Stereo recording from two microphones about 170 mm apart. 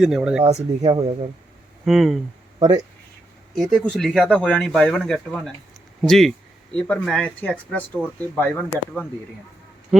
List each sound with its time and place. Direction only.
0.0 s speech: 5° right (ahead or behind)
0.4 s speech: 40° right (ahead or behind)
1.8 s speech: centre (ahead or behind)
3.5 s speech: centre (ahead or behind)